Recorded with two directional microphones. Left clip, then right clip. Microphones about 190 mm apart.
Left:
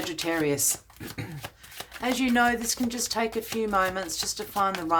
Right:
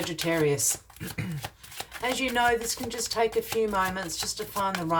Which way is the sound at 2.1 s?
30° left (ahead or behind).